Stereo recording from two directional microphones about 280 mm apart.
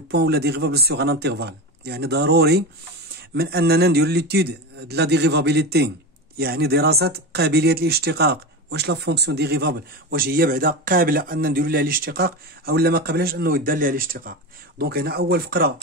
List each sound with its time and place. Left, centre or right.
0.1 s a man's voice: right